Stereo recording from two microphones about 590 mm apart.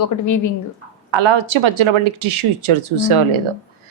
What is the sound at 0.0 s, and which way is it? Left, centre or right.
Speech, left.